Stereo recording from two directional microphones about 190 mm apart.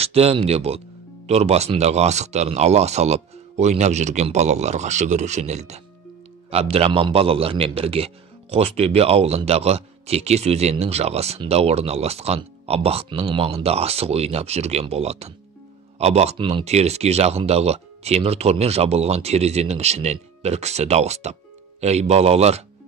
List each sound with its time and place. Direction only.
0.0 s a man's voice: 30° right (ahead or behind)